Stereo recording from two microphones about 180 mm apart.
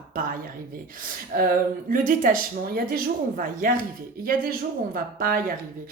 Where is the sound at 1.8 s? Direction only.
50° right (ahead or behind).